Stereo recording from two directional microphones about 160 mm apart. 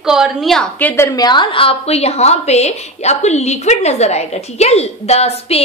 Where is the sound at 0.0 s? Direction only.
5° right (ahead or behind).